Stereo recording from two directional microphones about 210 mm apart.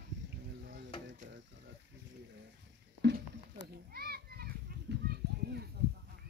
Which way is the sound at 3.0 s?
55° right (ahead or behind).